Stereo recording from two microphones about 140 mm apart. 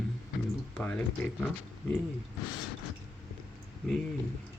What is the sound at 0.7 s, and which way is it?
Speech, 10° left (ahead or behind).